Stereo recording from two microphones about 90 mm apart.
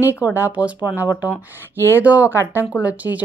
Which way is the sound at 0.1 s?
20° right (ahead or behind).